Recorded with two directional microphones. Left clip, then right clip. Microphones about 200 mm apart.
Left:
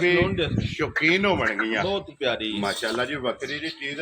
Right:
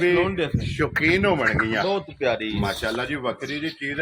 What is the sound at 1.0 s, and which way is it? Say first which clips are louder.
Speech: right 1 dB; 40° right (ahead or behind).